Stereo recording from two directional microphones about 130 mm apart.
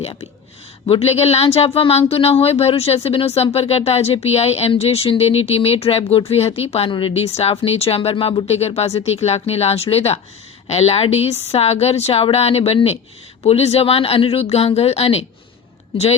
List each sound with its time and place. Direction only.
0.0 s speech: 50° left (ahead or behind)